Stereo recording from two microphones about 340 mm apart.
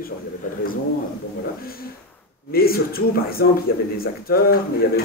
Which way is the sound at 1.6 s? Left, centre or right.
Left.